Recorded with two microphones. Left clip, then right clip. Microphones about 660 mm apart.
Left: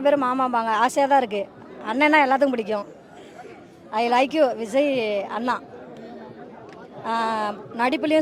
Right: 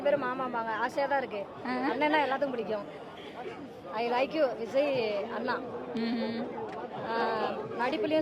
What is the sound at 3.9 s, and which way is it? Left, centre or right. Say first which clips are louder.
Speech: left 9 dB; left.